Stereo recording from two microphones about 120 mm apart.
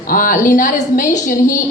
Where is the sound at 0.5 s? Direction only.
90° left.